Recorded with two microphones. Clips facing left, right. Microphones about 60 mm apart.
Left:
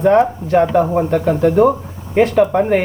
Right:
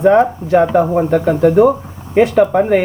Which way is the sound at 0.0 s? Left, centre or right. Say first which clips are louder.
Right 2 dB; centre.